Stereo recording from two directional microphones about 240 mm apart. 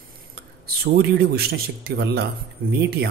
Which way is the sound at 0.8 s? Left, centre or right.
Right.